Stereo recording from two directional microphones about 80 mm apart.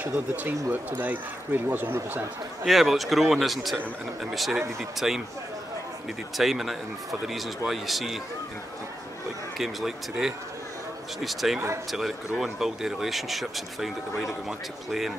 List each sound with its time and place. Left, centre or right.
0.0 s speech: right
2.6 s a man's voice: centre
6.3 s a man's voice: centre
9.6 s a man's voice: centre